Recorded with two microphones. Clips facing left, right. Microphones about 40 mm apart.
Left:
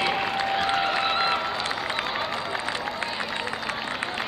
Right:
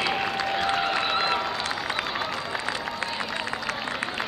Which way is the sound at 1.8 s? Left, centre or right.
Centre.